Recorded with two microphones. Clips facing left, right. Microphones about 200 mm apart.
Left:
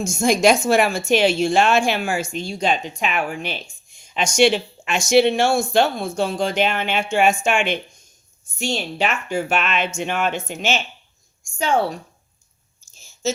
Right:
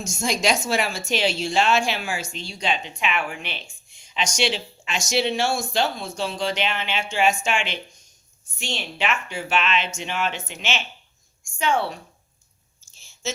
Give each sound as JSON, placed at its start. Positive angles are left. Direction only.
{"t": 0.0, "sound": "a woman's voice", "side_deg": 55}
{"t": 13.2, "sound": "speech", "side_deg": 40}